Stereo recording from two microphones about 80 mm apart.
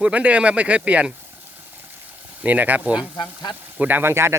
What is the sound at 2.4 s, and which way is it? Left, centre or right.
Speech, right.